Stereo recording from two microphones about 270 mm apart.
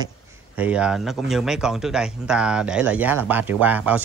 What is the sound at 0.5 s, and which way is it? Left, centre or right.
Speech, centre.